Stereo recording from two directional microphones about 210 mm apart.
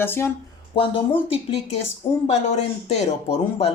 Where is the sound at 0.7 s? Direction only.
25° left (ahead or behind).